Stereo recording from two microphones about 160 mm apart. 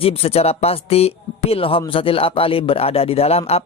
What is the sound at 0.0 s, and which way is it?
A man's voice, 35° left (ahead or behind).